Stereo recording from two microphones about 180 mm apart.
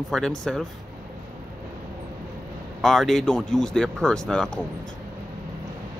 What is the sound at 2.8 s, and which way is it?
Speech, centre (ahead or behind).